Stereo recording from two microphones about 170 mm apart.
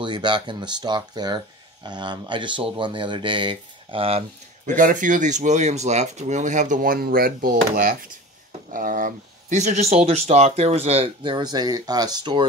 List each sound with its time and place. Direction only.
0.0 s speech: 25° right (ahead or behind)
4.6 s speech: 50° right (ahead or behind); by 12.4 s 25° right (ahead or behind)